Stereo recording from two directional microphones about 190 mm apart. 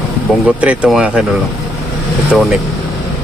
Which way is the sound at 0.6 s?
5° right (ahead or behind).